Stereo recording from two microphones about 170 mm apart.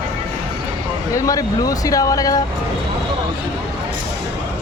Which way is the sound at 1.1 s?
20° left (ahead or behind).